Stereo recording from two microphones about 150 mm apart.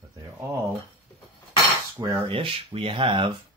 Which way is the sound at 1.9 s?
20° right (ahead or behind).